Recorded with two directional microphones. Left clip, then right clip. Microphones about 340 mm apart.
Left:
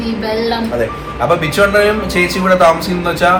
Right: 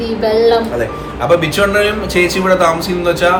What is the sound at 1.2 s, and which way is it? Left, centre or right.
Speech, centre.